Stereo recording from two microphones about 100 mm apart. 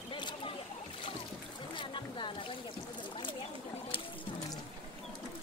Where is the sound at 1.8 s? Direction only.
55° left (ahead or behind).